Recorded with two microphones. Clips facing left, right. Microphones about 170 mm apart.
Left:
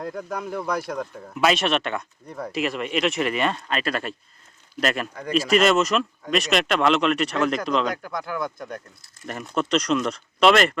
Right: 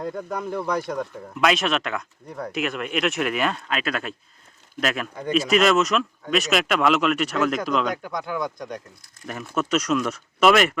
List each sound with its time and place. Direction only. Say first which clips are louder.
0.0 s speech: right 1 dB; centre (ahead or behind)
8.1 s speech: right 1 dB; 20° right (ahead or behind)
8.4 s speech: right 1 dB; 5° left (ahead or behind)